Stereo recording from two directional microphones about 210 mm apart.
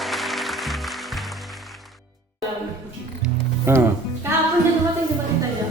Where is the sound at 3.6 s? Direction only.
10° right (ahead or behind).